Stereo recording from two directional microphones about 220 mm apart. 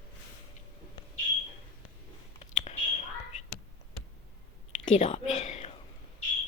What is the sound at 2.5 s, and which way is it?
Whispering, 30° left (ahead or behind).